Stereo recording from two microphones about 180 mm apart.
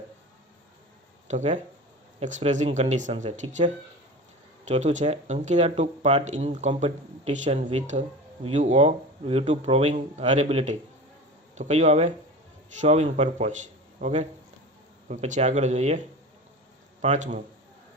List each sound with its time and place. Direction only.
1.3 s speech: 40° right (ahead or behind)
4.7 s speech: 40° right (ahead or behind)